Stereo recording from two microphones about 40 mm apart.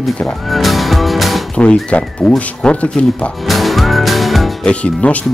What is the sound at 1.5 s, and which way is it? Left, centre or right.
Speech, left.